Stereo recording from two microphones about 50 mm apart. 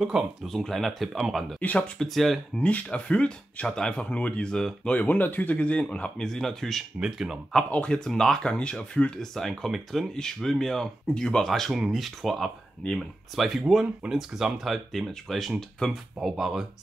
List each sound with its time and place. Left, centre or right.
0.0 s speech: centre
0.5 s speech: centre
1.6 s speech: left
2.0 s speech: centre
2.6 s speech: left
3.6 s speech: centre
4.0 s speech: left
4.8 s speech: left
5.6 s speech: left
6.2 s speech: centre
7.0 s speech: centre
7.7 s speech: centre
9.1 s speech: centre